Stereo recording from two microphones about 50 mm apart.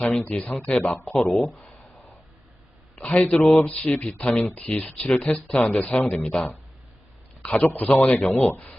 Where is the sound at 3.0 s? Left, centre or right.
Left.